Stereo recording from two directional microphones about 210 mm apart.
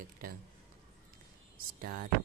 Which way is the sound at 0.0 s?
45° right (ahead or behind).